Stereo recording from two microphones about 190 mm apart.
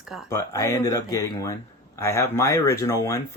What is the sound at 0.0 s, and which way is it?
Speech, centre (ahead or behind).